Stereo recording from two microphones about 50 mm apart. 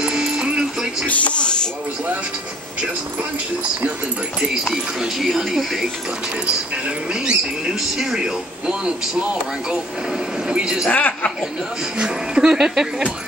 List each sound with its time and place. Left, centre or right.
0.0 s music: centre
1.0 s speech: left
5.0 s speech: centre
7.2 s speech: centre
10.9 s a woman's voice: left
12.0 s speech: centre